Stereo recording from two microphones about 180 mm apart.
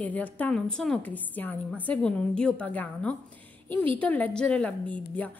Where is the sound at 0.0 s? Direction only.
10° left (ahead or behind).